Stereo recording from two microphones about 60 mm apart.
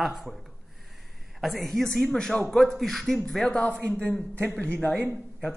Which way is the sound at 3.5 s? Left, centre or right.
Centre.